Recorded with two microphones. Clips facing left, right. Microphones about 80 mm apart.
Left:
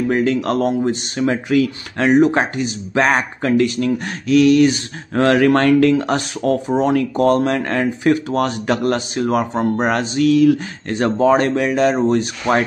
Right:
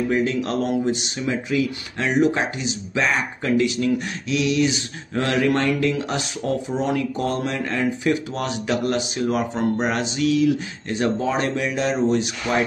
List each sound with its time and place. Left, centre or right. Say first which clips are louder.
0.1 s speech: left 5 dB; left